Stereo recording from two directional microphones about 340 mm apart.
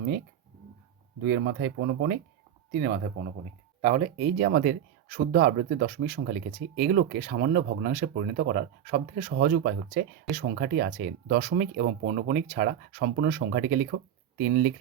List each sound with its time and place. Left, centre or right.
1.2 s speech: right